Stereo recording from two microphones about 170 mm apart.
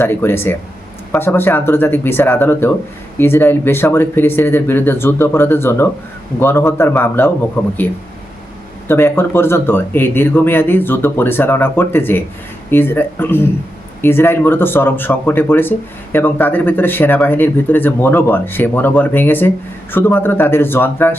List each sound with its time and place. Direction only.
0.0 s speech: 15° left (ahead or behind)
8.9 s speech: 15° left (ahead or behind)